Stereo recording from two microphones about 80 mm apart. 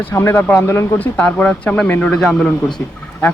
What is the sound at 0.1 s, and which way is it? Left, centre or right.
Speech, left.